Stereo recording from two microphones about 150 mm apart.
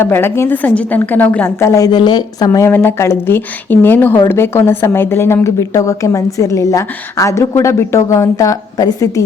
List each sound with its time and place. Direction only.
0.0 s a woman's voice: 15° left (ahead or behind)